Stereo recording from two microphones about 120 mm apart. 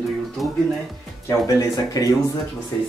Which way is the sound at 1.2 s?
30° left (ahead or behind).